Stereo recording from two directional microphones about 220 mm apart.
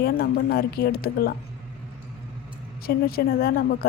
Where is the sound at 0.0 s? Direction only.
45° left (ahead or behind).